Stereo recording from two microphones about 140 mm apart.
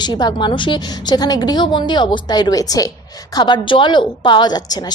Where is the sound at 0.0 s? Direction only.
30° left (ahead or behind).